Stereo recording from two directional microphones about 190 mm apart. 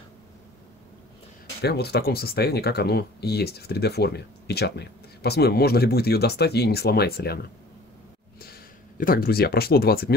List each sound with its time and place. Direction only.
1.6 s speech: 60° left (ahead or behind)
8.4 s speech: 50° left (ahead or behind)